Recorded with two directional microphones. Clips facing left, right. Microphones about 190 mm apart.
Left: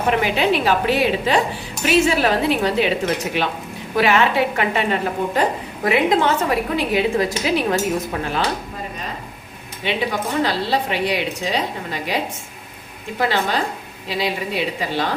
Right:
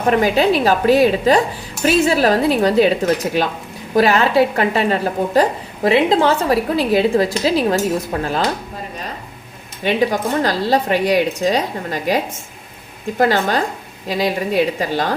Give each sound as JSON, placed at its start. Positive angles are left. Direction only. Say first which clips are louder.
{"t": 0.1, "sound": "a woman's voice", "louder": "right 5 dB", "side_deg": -40}
{"t": 9.8, "sound": "a woman's voice", "louder": "right 5 dB", "side_deg": -45}